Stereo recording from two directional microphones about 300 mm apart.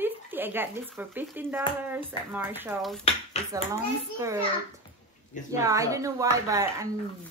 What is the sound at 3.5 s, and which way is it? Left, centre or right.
Speech, centre.